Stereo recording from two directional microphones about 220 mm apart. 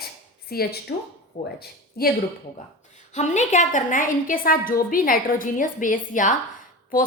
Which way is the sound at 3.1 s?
30° left (ahead or behind).